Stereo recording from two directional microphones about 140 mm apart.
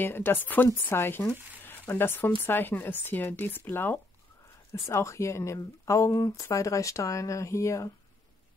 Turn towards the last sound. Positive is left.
turn(degrees=20)  # may be behind; listen again after turning